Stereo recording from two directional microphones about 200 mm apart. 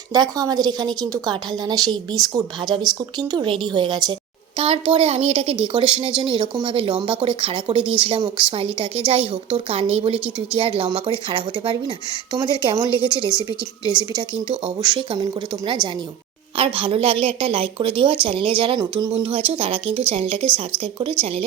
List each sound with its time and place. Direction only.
0.1 s a woman's voice: 20° right (ahead or behind)